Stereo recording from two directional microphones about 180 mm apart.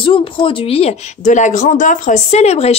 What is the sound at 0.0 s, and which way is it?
Speech, 30° left (ahead or behind).